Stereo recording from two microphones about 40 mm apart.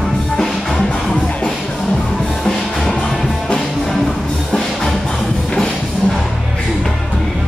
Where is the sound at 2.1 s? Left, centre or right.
Centre.